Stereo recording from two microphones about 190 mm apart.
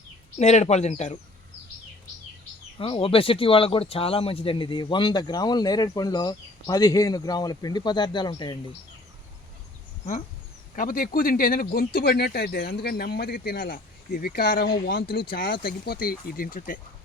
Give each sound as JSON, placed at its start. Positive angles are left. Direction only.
{"t": 0.3, "sound": "speech", "side_deg": 35}
{"t": 2.7, "sound": "speech", "side_deg": 25}
{"t": 10.8, "sound": "speech", "side_deg": 50}